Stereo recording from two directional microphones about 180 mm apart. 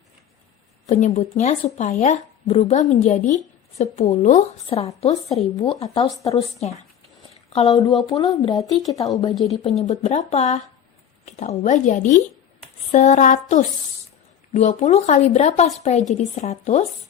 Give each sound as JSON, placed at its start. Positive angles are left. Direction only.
{"t": 0.9, "sound": "speech", "side_deg": 40}
{"t": 7.7, "sound": "speech", "side_deg": 20}
{"t": 9.6, "sound": "speech", "side_deg": 35}